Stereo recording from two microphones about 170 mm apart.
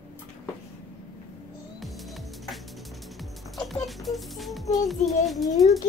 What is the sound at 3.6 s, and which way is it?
Speech, centre (ahead or behind).